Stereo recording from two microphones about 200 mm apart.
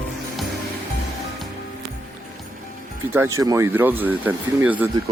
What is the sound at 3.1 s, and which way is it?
Speech, 15° right (ahead or behind).